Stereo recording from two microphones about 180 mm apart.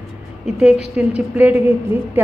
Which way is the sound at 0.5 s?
5° right (ahead or behind).